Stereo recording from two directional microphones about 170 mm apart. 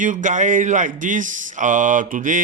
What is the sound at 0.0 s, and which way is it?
Speech, 50° right (ahead or behind).